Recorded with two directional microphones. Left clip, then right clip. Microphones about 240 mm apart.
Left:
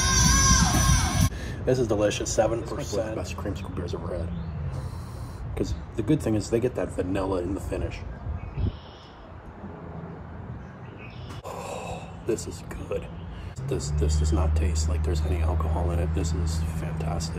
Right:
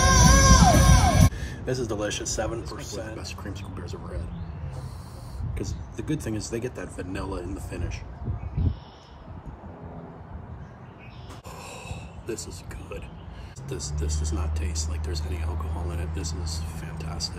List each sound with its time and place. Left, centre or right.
0.0 s music: centre
1.4 s speech: centre
5.5 s speech: centre
11.4 s a sound: centre
13.7 s speech: right
14.3 s speech: centre